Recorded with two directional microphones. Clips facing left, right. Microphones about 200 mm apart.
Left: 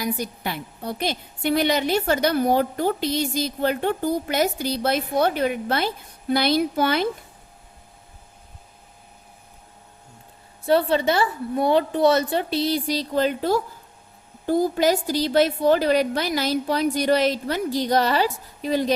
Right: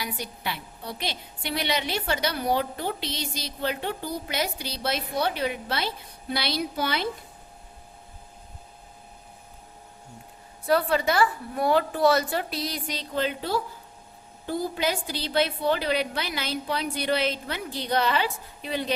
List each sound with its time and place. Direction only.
0.0 s a woman's voice: 45° left (ahead or behind)
10.7 s a woman's voice: 25° left (ahead or behind)